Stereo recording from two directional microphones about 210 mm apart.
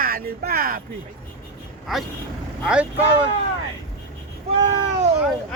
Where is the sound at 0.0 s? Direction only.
45° right (ahead or behind).